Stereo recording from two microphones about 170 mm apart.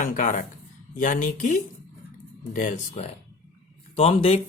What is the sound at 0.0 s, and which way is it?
Speech, 50° left (ahead or behind).